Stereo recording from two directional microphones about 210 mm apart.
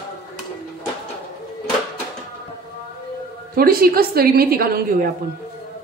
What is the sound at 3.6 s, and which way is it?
A woman's voice, 45° right (ahead or behind).